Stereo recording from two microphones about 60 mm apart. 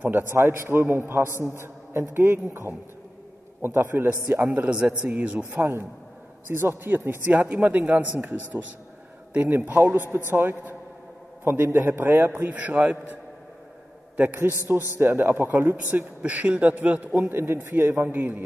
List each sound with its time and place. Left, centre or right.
0.3 s a man's voice: right
3.6 s a man's voice: right
4.6 s a man's voice: right
6.5 s a man's voice: right
14.1 s a man's voice: right
17.3 s a man's voice: right